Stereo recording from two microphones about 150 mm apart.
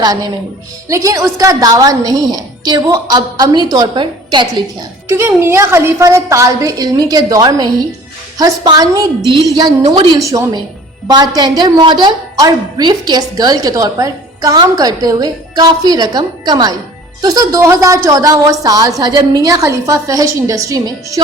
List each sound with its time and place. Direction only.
0.0 s a woman's voice: 25° right (ahead or behind)
5.0 s a woman's voice: 20° right (ahead or behind)
9.8 s a woman's voice: 45° right (ahead or behind)
10.1 s a woman's voice: 20° right (ahead or behind)